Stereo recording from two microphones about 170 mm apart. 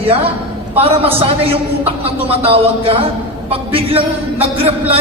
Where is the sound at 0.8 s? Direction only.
35° right (ahead or behind).